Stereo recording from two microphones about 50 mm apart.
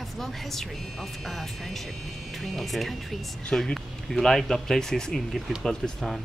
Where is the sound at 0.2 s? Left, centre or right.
Centre.